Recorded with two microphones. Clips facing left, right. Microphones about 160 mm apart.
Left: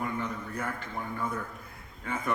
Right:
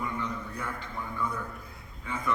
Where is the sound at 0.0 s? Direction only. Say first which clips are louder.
Left 1 dB; 50° left (ahead or behind).